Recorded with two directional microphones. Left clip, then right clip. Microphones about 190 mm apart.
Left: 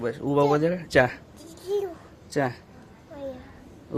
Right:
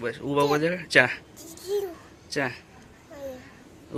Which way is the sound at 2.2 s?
20° left (ahead or behind).